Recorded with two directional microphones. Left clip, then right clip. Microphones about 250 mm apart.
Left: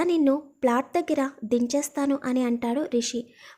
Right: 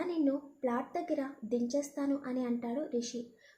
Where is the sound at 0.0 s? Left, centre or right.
Left.